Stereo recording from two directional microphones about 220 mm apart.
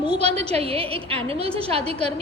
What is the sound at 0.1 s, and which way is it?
A woman's voice, 30° right (ahead or behind).